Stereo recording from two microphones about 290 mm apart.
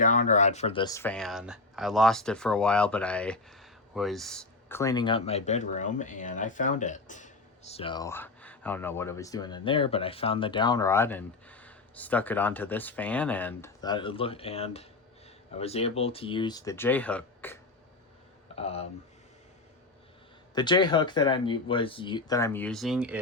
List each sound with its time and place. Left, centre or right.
0.0 s speech: left; by 17.6 s centre
18.5 s speech: left
20.6 s speech: centre